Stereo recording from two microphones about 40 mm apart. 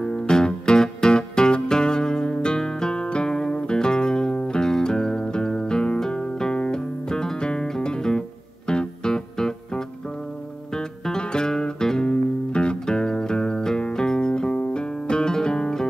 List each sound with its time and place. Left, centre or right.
0.0 s music: centre